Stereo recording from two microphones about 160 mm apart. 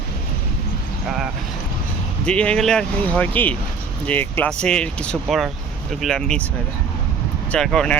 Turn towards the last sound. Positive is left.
turn(degrees=5)  # may be behind; listen again after turning